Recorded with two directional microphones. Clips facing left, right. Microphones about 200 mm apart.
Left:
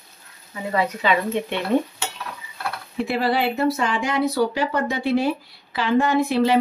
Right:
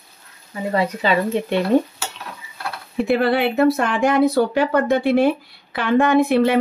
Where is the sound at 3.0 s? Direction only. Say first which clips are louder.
Right 4 dB; 55° right (ahead or behind).